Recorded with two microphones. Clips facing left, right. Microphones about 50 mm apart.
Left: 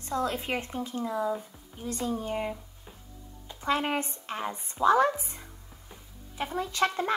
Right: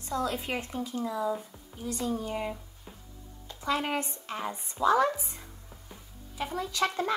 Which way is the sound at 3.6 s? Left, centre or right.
Left.